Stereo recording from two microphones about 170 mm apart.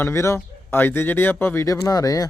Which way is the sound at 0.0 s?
15° left (ahead or behind).